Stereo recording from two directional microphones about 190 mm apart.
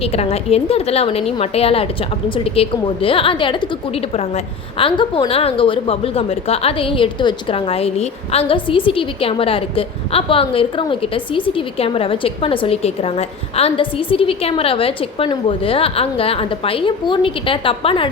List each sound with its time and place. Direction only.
0.0 s a woman's voice: 30° left (ahead or behind)